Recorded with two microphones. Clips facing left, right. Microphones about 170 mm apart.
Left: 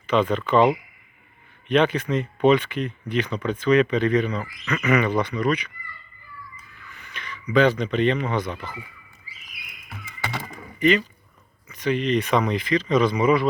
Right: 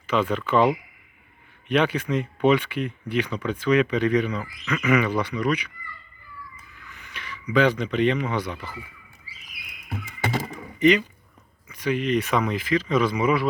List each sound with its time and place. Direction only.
0.1 s speech: 10° right (ahead or behind)
1.6 s speech: 10° right (ahead or behind)
7.0 s speech: 10° right (ahead or behind)
10.8 s speech: 15° right (ahead or behind)